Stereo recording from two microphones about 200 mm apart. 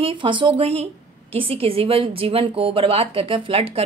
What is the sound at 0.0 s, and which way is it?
A woman's voice, 25° right (ahead or behind).